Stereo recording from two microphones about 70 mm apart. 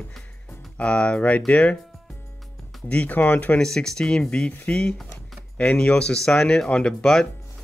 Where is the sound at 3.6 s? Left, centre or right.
Centre.